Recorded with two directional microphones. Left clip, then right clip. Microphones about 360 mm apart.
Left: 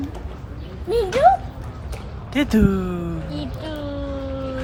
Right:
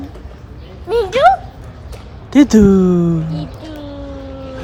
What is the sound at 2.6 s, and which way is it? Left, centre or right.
Speech, left.